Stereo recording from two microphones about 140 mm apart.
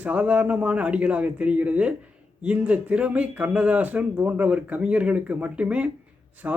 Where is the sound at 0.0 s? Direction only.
10° right (ahead or behind).